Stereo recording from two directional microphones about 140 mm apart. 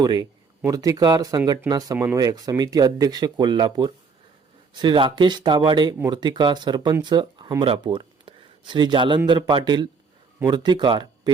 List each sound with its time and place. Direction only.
0.0 s speech: 30° right (ahead or behind)